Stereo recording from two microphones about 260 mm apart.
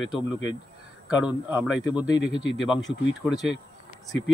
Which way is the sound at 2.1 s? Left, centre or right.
Centre.